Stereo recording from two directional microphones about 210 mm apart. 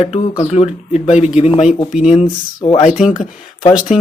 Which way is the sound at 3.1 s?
40° left (ahead or behind).